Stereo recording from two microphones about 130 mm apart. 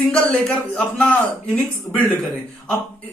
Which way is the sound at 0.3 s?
10° left (ahead or behind).